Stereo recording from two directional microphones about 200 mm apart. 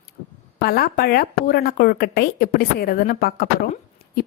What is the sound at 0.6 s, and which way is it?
A woman's voice, 50° left (ahead or behind).